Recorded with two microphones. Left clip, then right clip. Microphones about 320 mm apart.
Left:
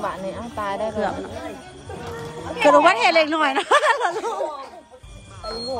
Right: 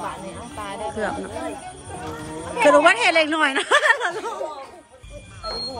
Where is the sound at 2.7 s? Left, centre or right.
Centre.